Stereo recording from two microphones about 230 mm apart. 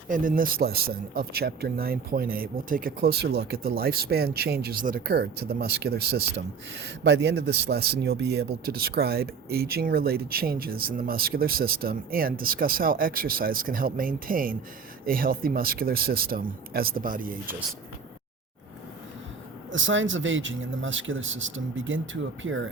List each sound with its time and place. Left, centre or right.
0.1 s speech: right
19.7 s speech: right